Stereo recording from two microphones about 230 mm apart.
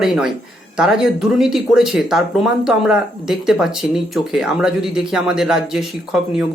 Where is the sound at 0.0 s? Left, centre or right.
Centre.